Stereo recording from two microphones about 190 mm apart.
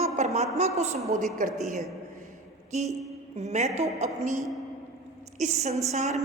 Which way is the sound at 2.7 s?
35° right (ahead or behind).